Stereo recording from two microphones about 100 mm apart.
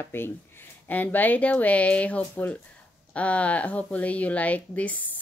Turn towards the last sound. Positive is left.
turn(degrees=15)  # may be behind; listen again after turning